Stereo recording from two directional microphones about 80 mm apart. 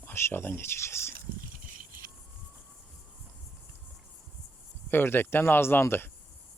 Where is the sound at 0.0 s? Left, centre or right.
Left.